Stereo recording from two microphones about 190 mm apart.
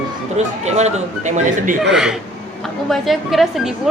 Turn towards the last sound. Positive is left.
turn(degrees=0)  # may be behind; listen again after turning